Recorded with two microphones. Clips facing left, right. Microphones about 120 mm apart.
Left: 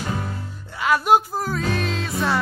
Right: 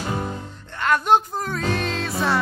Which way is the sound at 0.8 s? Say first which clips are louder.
Left 1 dB; 5° left (ahead or behind).